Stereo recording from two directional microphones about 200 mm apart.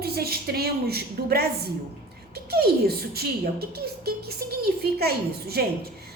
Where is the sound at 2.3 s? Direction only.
50° right (ahead or behind).